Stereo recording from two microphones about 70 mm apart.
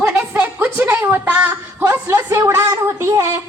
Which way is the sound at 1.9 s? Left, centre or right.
Right.